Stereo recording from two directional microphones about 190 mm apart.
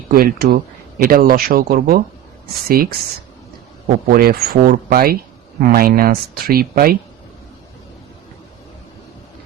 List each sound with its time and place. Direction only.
0.1 s speech: 50° right (ahead or behind)